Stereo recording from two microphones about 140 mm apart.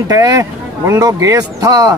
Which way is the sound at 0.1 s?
25° right (ahead or behind).